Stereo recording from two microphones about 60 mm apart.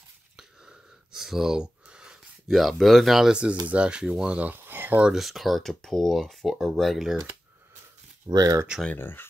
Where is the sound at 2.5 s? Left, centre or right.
Centre.